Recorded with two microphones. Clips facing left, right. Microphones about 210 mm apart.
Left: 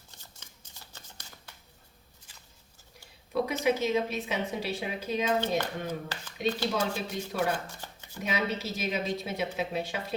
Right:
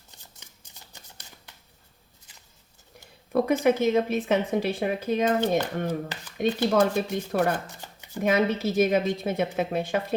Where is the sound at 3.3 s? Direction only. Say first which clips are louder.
Right 7 dB; 55° right (ahead or behind).